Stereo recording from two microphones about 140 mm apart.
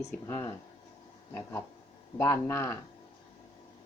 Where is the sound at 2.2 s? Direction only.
20° left (ahead or behind).